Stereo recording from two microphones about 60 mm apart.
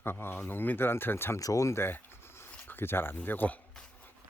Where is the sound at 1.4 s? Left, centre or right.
Left.